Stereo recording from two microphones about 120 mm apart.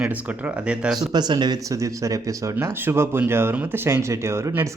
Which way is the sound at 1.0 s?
35° right (ahead or behind).